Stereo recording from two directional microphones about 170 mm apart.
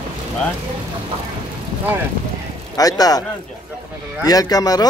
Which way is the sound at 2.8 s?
20° left (ahead or behind).